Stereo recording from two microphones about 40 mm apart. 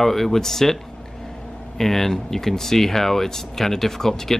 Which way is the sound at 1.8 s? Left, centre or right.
Centre.